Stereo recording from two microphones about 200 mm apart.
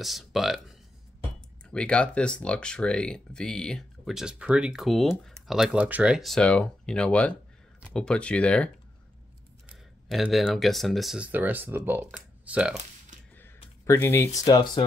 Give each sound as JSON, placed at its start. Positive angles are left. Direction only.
{"t": 0.0, "sound": "speech", "side_deg": 0}
{"t": 10.0, "sound": "speech", "side_deg": 0}
{"t": 13.8, "sound": "speech", "side_deg": 10}